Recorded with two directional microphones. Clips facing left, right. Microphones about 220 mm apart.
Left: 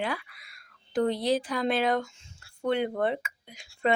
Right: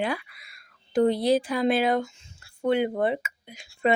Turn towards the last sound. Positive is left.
turn(degrees=-5)  # may be behind; listen again after turning